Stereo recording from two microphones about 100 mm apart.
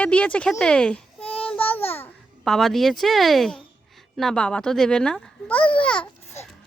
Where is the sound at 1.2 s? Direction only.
70° left (ahead or behind).